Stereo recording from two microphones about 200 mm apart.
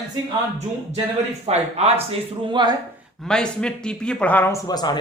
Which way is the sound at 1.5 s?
30° right (ahead or behind).